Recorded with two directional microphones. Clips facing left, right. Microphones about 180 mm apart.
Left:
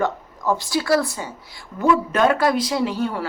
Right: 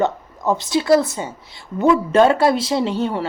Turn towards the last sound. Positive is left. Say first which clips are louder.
# right 2 dB
turn(degrees=-25)  # may be behind; listen again after turning